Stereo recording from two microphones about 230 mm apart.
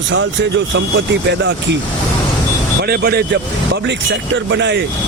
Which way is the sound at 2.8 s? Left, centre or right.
Right.